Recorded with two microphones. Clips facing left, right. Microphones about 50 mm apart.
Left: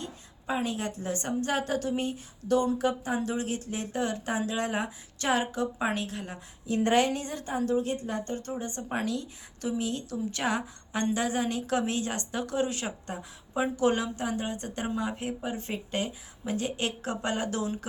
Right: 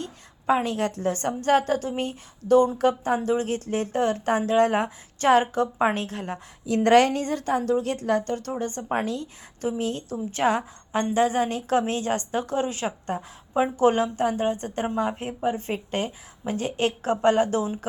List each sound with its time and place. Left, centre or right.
0.0 s a woman's voice: right
6.7 s a woman's voice: right
8.3 s speech: right